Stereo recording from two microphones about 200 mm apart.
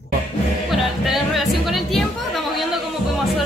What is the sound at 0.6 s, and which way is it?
Music, centre (ahead or behind).